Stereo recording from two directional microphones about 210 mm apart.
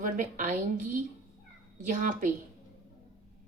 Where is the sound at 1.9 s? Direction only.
40° right (ahead or behind).